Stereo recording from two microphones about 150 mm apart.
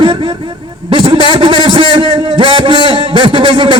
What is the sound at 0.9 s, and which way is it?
A man's voice, 35° right (ahead or behind).